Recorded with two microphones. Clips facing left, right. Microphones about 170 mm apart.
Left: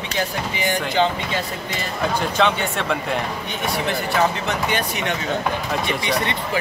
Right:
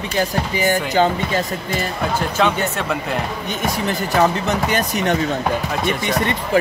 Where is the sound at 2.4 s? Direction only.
5° right (ahead or behind).